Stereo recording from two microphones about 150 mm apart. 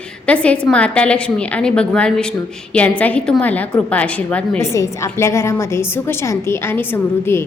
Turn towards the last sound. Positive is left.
turn(degrees=15)  # may be behind; listen again after turning